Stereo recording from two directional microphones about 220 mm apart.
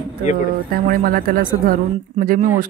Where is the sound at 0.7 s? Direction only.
40° right (ahead or behind).